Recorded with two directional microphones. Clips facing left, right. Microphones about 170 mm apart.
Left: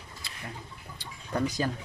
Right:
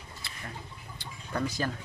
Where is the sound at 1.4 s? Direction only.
15° left (ahead or behind).